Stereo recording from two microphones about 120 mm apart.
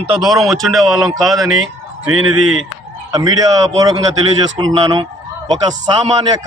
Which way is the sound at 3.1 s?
30° right (ahead or behind).